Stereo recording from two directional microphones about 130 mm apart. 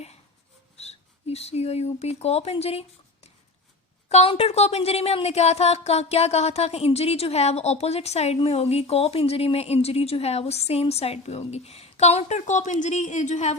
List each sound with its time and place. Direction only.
0.8 s speech: 55° left (ahead or behind)